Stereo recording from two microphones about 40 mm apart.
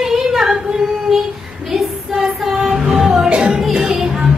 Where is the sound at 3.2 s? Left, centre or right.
Right.